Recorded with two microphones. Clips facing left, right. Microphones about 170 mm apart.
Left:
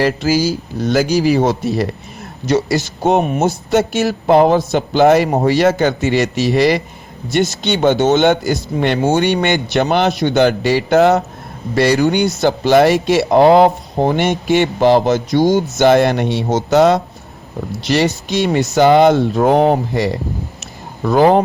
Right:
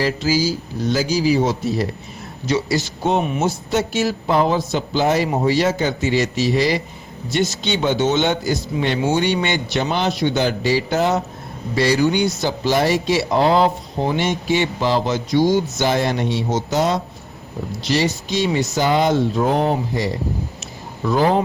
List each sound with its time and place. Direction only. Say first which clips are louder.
0.0 s speech: left 4 dB; 60° left (ahead or behind)
2.5 s speech: left 4 dB; 50° left (ahead or behind)